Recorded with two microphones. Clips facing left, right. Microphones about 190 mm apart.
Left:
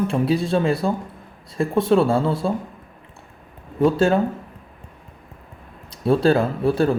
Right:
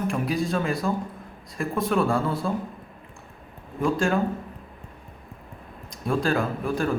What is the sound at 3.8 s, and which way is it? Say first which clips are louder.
Speech: left 7 dB; 35° left (ahead or behind).